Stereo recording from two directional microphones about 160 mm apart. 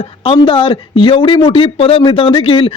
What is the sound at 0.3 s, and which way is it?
A man's voice, 30° left (ahead or behind).